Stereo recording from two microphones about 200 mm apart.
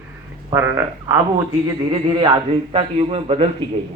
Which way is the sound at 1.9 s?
25° right (ahead or behind).